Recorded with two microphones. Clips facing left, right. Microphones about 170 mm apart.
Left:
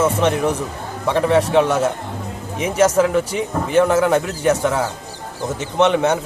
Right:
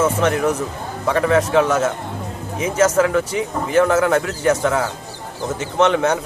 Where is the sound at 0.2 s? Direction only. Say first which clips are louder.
Even; 25° left (ahead or behind).